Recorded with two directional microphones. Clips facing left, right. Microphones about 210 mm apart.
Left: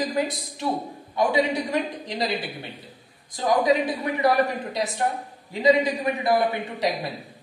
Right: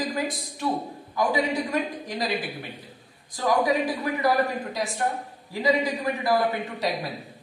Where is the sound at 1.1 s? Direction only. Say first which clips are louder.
Left 2 dB; 25° left (ahead or behind).